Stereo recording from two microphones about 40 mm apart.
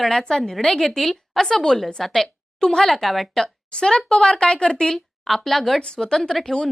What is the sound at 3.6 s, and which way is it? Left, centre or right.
A woman's voice, centre.